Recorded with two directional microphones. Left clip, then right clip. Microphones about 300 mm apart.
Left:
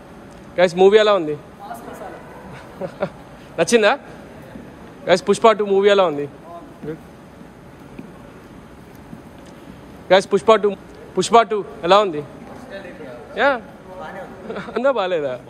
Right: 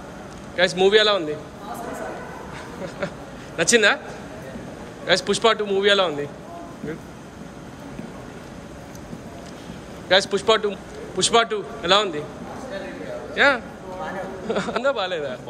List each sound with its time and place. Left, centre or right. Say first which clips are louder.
0.6 s a man's voice: left 4 dB; centre
3.5 s a man's voice: left 2 dB; centre
5.0 s a man's voice: left 5 dB; centre
10.0 s a man's voice: left 4 dB; centre
13.3 s speech: even; centre
14.5 s speech: right 5 dB; centre
14.8 s a man's voice: left 8 dB; centre